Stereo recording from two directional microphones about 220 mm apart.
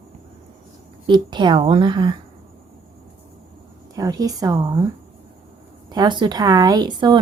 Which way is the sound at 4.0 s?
15° right (ahead or behind).